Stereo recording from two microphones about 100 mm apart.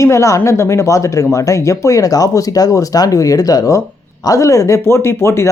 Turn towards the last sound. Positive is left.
turn(degrees=25)  # may be behind; listen again after turning